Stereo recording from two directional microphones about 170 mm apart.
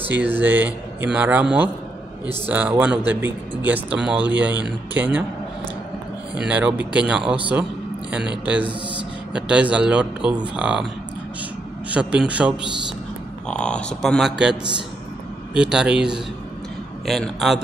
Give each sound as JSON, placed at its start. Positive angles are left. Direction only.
{"t": 0.2, "sound": "speech", "side_deg": -10}
{"t": 6.3, "sound": "speech", "side_deg": -5}
{"t": 11.9, "sound": "speech", "side_deg": -5}
{"t": 13.5, "sound": "speech", "side_deg": 5}